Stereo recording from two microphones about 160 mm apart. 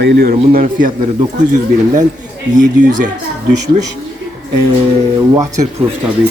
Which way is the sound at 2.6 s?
55° right (ahead or behind).